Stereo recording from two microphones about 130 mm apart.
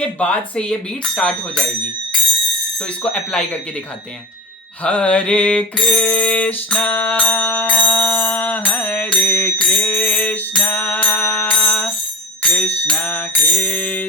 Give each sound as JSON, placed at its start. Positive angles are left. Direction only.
{"t": 0.0, "sound": "mantra", "side_deg": 10}
{"t": 2.7, "sound": "mantra", "side_deg": 5}
{"t": 4.8, "sound": "mantra", "side_deg": 10}
{"t": 12.4, "sound": "bicycle bell", "side_deg": 10}
{"t": 12.9, "sound": "mantra", "side_deg": 10}